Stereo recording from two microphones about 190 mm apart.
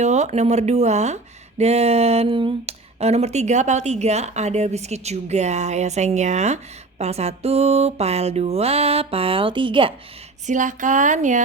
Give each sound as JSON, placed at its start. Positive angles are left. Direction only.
{"t": 0.0, "sound": "speech", "side_deg": -35}
{"t": 10.4, "sound": "speech", "side_deg": -40}